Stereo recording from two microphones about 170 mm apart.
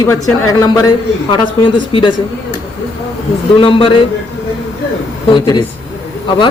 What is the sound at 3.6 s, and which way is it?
Speech, 30° left (ahead or behind).